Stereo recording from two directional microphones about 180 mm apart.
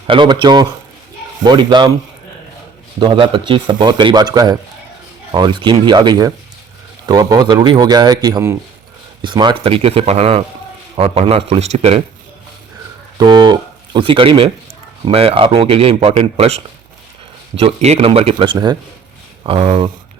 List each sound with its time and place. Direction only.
0.1 s speech: 25° right (ahead or behind)
3.0 s speech: 25° right (ahead or behind)
13.1 s speech: 25° right (ahead or behind)
17.6 s speech: 35° right (ahead or behind)